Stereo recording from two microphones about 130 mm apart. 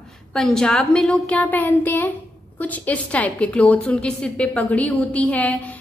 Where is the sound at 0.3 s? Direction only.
5° left (ahead or behind).